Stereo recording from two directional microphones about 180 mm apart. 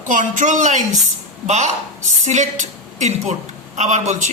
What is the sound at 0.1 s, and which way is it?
A man's voice, 45° right (ahead or behind).